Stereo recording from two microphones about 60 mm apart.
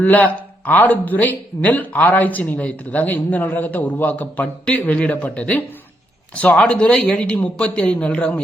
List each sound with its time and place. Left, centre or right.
0.0 s a man's voice: left; by 7.3 s centre
7.3 s speech: left